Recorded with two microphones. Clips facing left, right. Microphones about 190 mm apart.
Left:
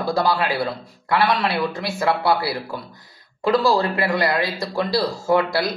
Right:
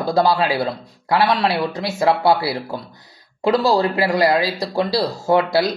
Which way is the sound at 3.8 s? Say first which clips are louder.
Right 3 dB; 30° right (ahead or behind).